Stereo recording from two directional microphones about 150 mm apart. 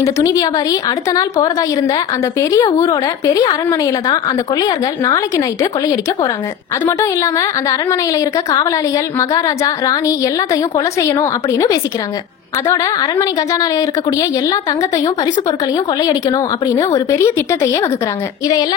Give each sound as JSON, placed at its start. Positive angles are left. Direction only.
{"t": 0.0, "sound": "a woman's voice", "side_deg": 20}
{"t": 7.0, "sound": "a woman's voice", "side_deg": 20}
{"t": 16.0, "sound": "a woman's voice", "side_deg": 25}